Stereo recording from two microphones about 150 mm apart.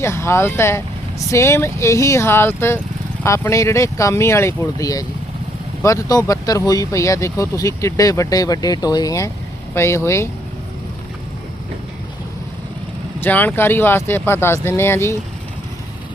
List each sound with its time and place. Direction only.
0.0 s speech: 20° left (ahead or behind)
13.1 s speech: 15° left (ahead or behind)